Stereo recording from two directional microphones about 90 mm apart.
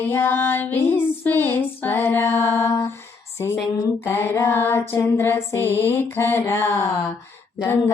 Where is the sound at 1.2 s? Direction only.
20° left (ahead or behind).